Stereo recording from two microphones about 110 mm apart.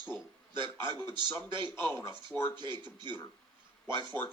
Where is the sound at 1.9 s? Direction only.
25° left (ahead or behind).